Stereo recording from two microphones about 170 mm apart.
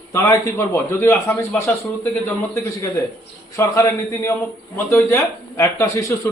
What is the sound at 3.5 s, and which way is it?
Speech, 15° left (ahead or behind).